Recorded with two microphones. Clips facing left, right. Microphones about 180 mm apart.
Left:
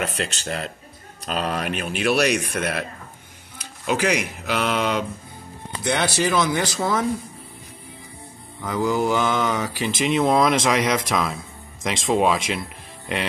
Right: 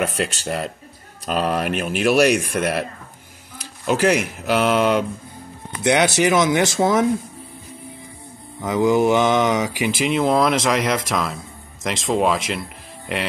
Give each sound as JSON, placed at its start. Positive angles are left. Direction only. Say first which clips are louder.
{"t": 0.2, "sound": "speech", "louder": "right 4 dB", "side_deg": -5}
{"t": 3.8, "sound": "speech", "louder": "right 4 dB", "side_deg": -45}
{"t": 4.2, "sound": "speech", "louder": "right 5 dB", "side_deg": -5}
{"t": 5.9, "sound": "speech", "louder": "right 5 dB", "side_deg": -20}
{"t": 8.5, "sound": "speech", "louder": "right 5 dB", "side_deg": -20}